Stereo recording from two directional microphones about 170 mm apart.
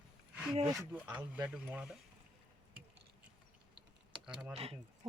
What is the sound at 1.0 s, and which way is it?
Speech, 10° right (ahead or behind).